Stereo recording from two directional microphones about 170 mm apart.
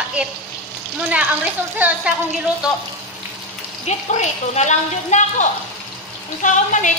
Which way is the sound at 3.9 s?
40° left (ahead or behind).